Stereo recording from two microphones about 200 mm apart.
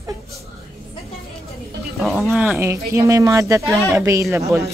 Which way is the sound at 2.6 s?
15° right (ahead or behind).